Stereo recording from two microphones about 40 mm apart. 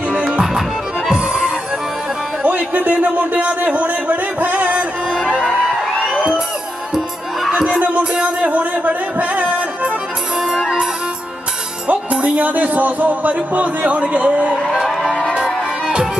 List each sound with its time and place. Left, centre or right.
0.4 s music: centre
2.4 s a man's voice: right
8.0 s music: right
8.4 s music: right
11.9 s a man's voice: right
15.3 s music: right